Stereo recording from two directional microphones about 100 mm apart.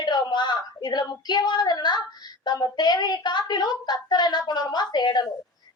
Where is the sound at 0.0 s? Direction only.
45° left (ahead or behind).